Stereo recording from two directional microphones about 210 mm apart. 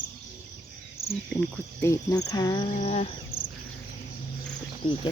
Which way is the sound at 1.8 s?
15° left (ahead or behind).